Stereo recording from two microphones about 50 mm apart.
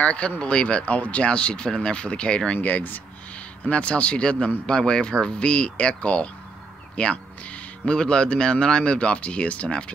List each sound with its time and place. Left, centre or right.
0.0 s speech: left
2.6 s speech: left
3.6 s speech: left